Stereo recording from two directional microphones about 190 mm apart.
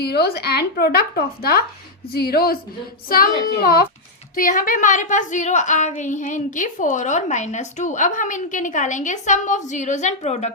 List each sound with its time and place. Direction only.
0.0 s a woman's voice: 55° left (ahead or behind); by 10.5 s 35° left (ahead or behind)